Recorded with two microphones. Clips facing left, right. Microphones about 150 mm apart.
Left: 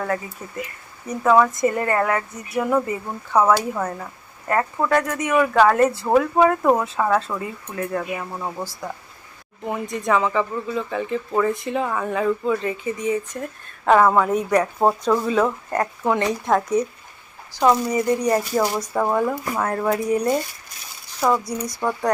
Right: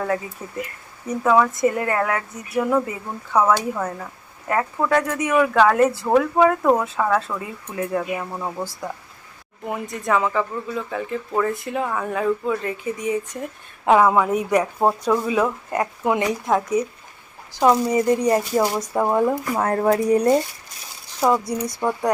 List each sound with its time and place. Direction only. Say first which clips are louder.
1.0 s speech: left 1 dB; 5° right (ahead or behind)
9.6 s speech: left 1 dB; 5° right (ahead or behind)
17.8 s speech: right 2 dB; 30° right (ahead or behind)
18.3 s speech: right 1 dB; 15° right (ahead or behind)
19.3 s speech: right 2 dB; 35° right (ahead or behind)
21.2 s speech: right 1 dB; 15° right (ahead or behind)